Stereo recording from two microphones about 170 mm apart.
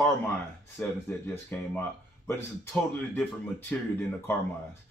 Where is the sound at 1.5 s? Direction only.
10° left (ahead or behind).